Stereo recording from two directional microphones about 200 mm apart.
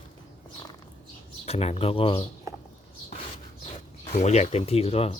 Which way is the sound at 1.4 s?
30° left (ahead or behind).